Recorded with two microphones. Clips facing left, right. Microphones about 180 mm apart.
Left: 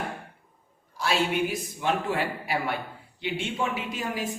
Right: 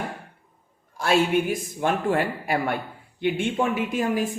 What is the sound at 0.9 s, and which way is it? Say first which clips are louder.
A man's voice: right 5 dB; 50° right (ahead or behind).